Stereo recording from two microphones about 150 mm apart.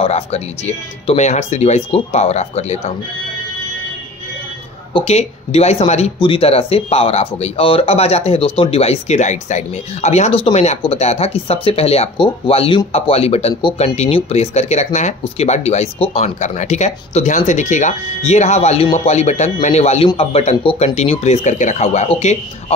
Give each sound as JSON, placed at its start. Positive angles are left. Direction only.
{"t": 0.0, "sound": "speech", "side_deg": 45}
{"t": 4.9, "sound": "speech", "side_deg": 45}
{"t": 6.1, "sound": "speech", "side_deg": 35}